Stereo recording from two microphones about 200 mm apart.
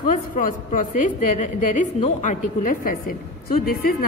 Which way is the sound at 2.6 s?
45° left (ahead or behind).